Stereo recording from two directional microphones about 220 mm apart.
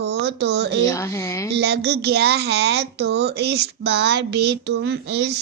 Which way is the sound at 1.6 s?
45° right (ahead or behind).